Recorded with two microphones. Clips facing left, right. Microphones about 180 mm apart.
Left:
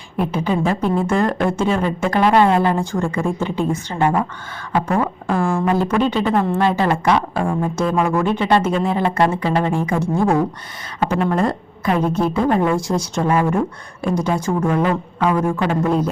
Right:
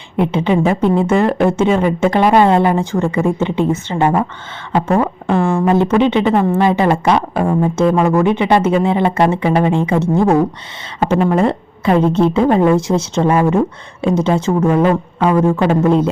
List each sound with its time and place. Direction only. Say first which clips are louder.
0.6 s a woman's voice: right 5 dB; 20° right (ahead or behind)
1.1 s speech: right 5 dB; 5° right (ahead or behind)
1.5 s a woman's voice: right 5 dB; 20° right (ahead or behind)
6.2 s a woman's voice: right 4 dB; 5° right (ahead or behind)
6.7 s a woman's voice: right 4 dB; 20° right (ahead or behind)
11.2 s speech: right 5 dB; 5° right (ahead or behind)
11.4 s a woman's voice: right 5 dB; 25° right (ahead or behind)